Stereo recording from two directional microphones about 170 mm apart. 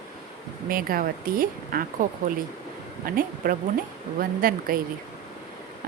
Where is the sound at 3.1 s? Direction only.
55° right (ahead or behind).